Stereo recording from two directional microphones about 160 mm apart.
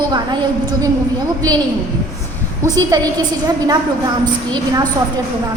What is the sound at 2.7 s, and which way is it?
A woman's voice, 25° right (ahead or behind).